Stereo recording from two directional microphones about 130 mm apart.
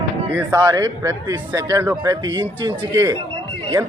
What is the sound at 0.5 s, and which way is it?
A man's voice, 25° right (ahead or behind).